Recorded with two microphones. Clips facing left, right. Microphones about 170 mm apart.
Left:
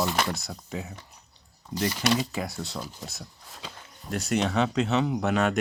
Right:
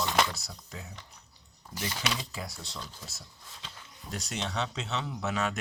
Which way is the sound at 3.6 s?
60° left (ahead or behind).